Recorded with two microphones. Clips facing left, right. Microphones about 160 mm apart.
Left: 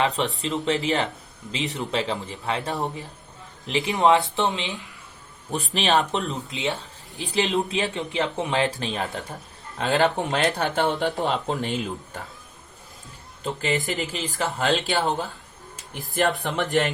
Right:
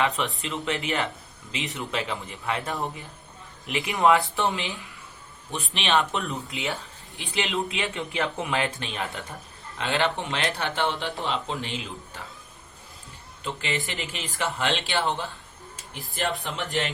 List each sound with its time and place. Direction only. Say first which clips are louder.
0.3 s speech: left 5 dB; 35° left (ahead or behind); by 4.8 s 20° left (ahead or behind)
5.5 s speech: left 4 dB; 40° left (ahead or behind)
6.2 s speech: left 3 dB; 20° left (ahead or behind)
7.2 s speech: left 5 dB; 35° left (ahead or behind)
7.9 s speech: left 3 dB; 25° left (ahead or behind); by 12.2 s 45° left (ahead or behind)
13.4 s speech: left 5 dB; 40° left (ahead or behind)